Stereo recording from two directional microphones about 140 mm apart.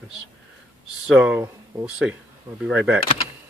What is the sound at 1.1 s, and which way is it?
Speech, 10° right (ahead or behind).